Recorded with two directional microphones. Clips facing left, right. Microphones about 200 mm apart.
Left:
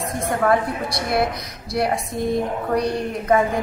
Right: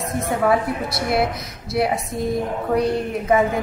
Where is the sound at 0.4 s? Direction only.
5° right (ahead or behind).